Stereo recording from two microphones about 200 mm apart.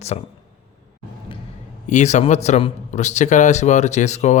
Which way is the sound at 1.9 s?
35° left (ahead or behind).